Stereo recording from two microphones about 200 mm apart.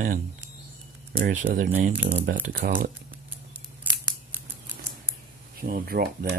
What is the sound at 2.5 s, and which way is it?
Speech, 45° right (ahead or behind).